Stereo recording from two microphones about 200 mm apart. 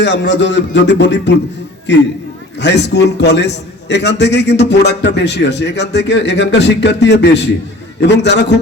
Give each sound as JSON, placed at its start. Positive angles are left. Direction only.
{"t": 0.0, "sound": "a man's voice", "side_deg": 60}